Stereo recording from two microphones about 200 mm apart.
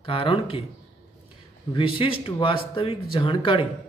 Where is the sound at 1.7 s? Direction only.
25° left (ahead or behind).